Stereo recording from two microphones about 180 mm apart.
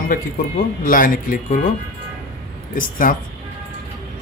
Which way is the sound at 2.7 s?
50° left (ahead or behind).